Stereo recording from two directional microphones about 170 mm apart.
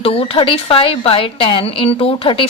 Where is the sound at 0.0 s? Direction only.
35° left (ahead or behind).